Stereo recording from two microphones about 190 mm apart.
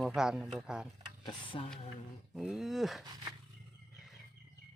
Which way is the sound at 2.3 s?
5° right (ahead or behind).